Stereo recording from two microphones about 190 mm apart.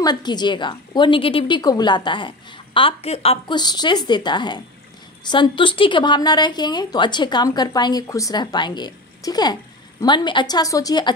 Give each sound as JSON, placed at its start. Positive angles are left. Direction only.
{"t": 0.0, "sound": "a woman's voice", "side_deg": 20}